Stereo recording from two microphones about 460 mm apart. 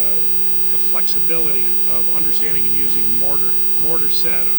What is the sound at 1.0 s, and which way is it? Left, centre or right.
Speech, left.